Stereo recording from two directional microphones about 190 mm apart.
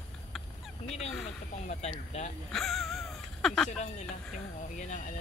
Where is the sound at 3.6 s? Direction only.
35° left (ahead or behind).